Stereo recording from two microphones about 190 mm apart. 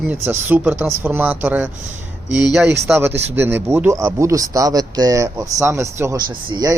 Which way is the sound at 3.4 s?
10° right (ahead or behind).